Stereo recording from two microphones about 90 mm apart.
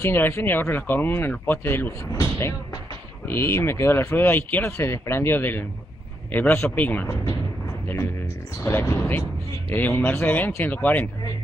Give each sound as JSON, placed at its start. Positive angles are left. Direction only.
{"t": 0.0, "sound": "speech", "side_deg": 25}
{"t": 3.3, "sound": "speech", "side_deg": 30}
{"t": 8.6, "sound": "speech", "side_deg": 30}